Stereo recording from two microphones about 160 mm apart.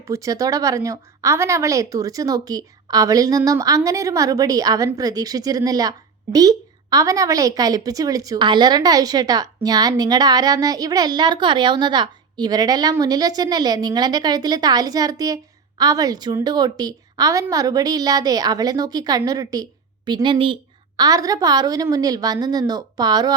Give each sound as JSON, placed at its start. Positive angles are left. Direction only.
{"t": 0.0, "sound": "a woman's voice", "side_deg": -20}